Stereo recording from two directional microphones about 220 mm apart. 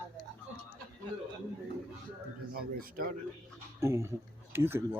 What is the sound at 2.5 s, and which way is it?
Speech, 40° right (ahead or behind).